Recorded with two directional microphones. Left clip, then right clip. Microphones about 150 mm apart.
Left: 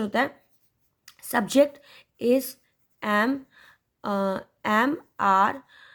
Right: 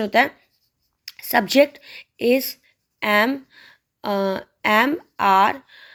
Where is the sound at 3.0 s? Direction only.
10° right (ahead or behind).